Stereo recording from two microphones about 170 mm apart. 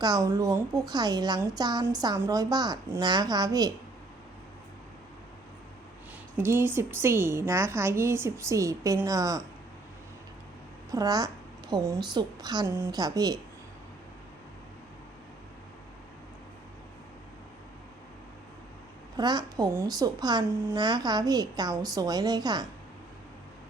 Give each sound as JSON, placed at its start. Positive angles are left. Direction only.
{"t": 0.0, "sound": "speech", "side_deg": -20}
{"t": 6.3, "sound": "a woman's voice", "side_deg": -15}
{"t": 10.9, "sound": "speech", "side_deg": -20}
{"t": 19.1, "sound": "speech", "side_deg": -25}